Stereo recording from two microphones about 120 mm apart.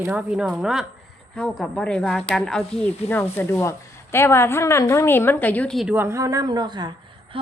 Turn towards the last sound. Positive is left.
turn(degrees=-35)  # may be behind; listen again after turning